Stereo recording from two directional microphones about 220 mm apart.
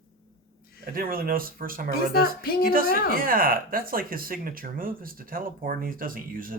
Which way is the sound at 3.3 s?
40° right (ahead or behind).